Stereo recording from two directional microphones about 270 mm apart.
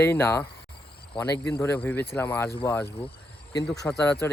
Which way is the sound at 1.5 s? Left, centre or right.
Centre.